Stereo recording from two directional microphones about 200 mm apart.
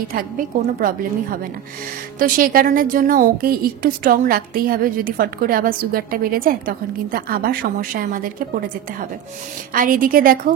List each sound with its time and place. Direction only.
0.1 s a woman's voice: 40° right (ahead or behind)
9.8 s a woman's voice: 45° right (ahead or behind)